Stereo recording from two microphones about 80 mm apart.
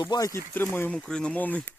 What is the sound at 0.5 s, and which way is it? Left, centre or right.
Speech, left.